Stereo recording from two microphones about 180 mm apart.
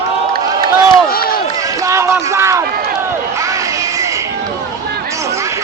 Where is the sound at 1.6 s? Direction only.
15° right (ahead or behind).